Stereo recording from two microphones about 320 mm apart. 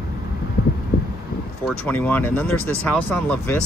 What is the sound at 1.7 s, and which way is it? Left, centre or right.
Speech, centre.